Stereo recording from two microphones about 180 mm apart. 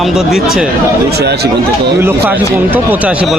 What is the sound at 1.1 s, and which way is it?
Speech, 65° right (ahead or behind).